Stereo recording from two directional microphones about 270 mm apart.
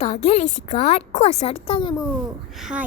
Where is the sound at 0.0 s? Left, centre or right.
Left.